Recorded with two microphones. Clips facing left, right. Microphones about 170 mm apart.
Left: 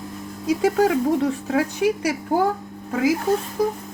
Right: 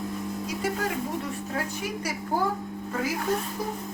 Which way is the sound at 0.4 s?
90° left.